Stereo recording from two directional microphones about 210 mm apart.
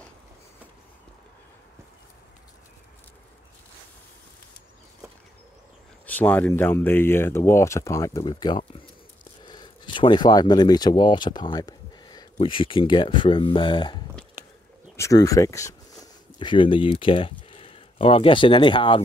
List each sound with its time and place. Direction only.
6.0 s speech: 10° left (ahead or behind); by 18.9 s 25° left (ahead or behind)